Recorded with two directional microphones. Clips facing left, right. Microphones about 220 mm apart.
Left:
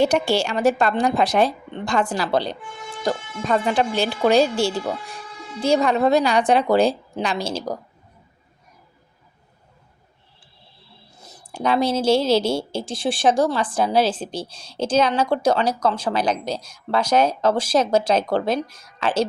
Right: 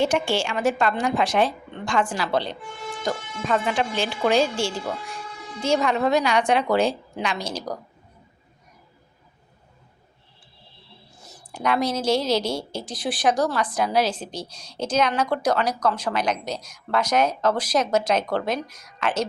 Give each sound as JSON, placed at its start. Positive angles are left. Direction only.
{"t": 0.0, "sound": "a woman's voice", "side_deg": 40}
{"t": 11.5, "sound": "speech", "side_deg": 30}